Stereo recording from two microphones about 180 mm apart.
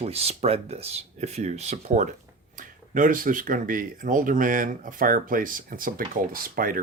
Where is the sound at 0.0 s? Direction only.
35° right (ahead or behind).